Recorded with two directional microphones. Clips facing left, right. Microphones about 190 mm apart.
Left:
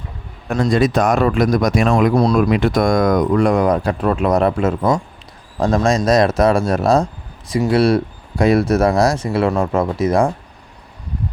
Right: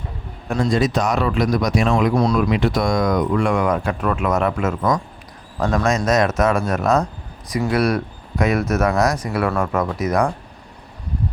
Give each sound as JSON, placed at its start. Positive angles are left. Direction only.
{"t": 0.6, "sound": "speech", "side_deg": 60}
{"t": 2.1, "sound": "speech", "side_deg": 35}
{"t": 2.5, "sound": "speech", "side_deg": 50}